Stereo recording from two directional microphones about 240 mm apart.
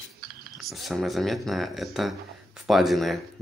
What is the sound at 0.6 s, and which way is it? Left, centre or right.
Speech, centre.